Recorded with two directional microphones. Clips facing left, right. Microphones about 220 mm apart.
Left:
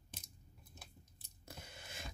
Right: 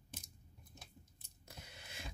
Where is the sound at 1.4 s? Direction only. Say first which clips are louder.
Left 3 dB; 45° left (ahead or behind).